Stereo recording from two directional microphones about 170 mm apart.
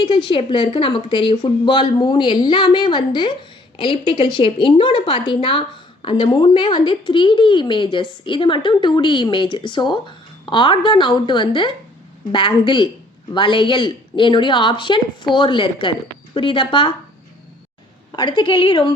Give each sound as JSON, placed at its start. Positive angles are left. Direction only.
{"t": 0.0, "sound": "a woman's voice", "side_deg": 25}
{"t": 18.2, "sound": "a woman's voice", "side_deg": 25}